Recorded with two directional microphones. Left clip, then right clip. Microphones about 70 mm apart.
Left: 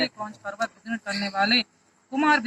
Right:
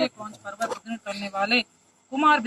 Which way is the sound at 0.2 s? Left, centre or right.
Right.